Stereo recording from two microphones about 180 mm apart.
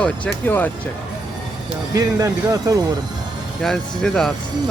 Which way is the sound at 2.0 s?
20° right (ahead or behind).